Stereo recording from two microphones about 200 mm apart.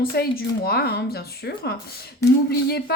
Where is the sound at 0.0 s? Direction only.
50° left (ahead or behind).